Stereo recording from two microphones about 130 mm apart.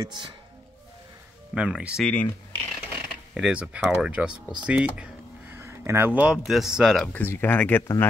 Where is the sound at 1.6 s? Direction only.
5° right (ahead or behind).